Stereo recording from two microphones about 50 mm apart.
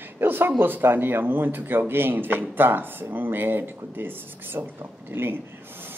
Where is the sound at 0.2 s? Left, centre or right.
Right.